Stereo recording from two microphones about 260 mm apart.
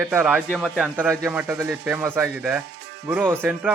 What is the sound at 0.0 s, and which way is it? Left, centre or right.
Speech, centre.